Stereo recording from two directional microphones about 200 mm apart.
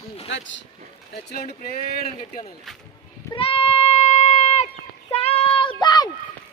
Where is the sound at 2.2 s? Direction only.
30° left (ahead or behind).